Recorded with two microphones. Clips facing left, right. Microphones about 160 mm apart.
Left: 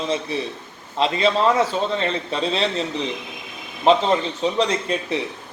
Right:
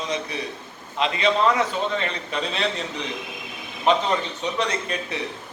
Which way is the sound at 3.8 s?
30° left (ahead or behind).